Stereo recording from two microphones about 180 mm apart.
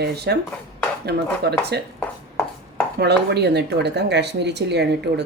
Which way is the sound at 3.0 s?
65° right (ahead or behind).